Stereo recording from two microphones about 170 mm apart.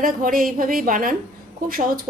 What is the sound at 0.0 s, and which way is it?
A woman's voice, 55° right (ahead or behind).